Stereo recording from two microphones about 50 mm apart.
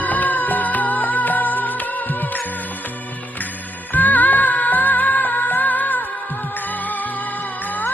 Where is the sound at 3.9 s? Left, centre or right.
Left.